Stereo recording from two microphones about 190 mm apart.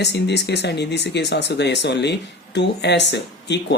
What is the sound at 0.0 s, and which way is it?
Speech, 65° left (ahead or behind).